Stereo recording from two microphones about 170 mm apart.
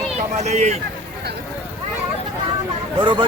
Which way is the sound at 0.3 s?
40° right (ahead or behind).